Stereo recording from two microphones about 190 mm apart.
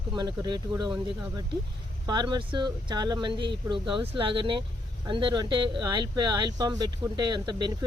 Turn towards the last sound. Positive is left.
turn(degrees=-25)  # may be behind; listen again after turning